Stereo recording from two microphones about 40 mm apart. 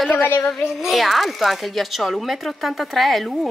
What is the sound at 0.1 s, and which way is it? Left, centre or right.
Child singing, left.